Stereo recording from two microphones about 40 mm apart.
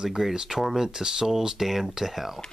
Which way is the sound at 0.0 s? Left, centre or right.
Centre.